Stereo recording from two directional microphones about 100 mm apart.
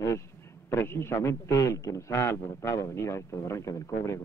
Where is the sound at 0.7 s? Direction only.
25° left (ahead or behind).